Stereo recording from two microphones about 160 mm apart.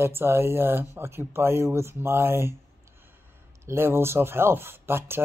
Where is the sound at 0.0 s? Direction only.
15° right (ahead or behind).